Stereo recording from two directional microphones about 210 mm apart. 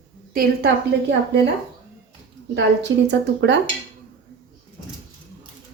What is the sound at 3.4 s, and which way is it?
Speech, 55° right (ahead or behind).